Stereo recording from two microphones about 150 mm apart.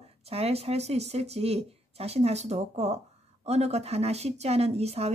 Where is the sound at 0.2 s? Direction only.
45° right (ahead or behind).